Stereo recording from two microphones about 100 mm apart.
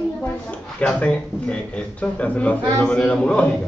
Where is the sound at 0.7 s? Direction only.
10° left (ahead or behind).